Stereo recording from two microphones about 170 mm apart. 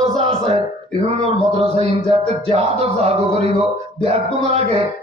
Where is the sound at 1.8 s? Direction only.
40° right (ahead or behind).